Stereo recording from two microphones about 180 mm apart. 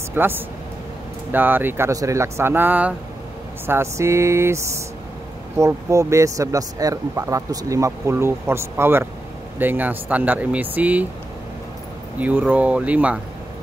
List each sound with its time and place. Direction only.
0.1 s speech: 10° right (ahead or behind)
12.2 s speech: 10° right (ahead or behind)